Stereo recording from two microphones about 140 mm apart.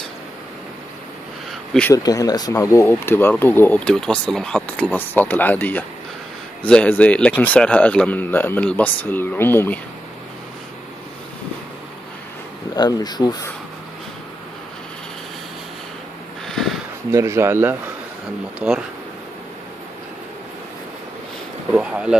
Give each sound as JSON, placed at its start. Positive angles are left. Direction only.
{"t": 1.5, "sound": "a sound", "side_deg": 0}
{"t": 2.0, "sound": "speech", "side_deg": 25}
{"t": 12.7, "sound": "speech", "side_deg": 30}
{"t": 16.4, "sound": "sniff", "side_deg": 0}
{"t": 17.1, "sound": "speech", "side_deg": -20}
{"t": 21.7, "sound": "speech", "side_deg": -5}